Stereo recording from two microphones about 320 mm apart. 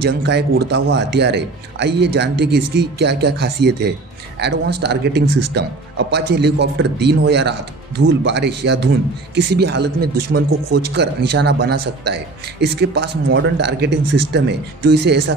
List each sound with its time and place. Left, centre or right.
0.0 s speech: right
5.2 s a man's voice: right
5.5 s speech: right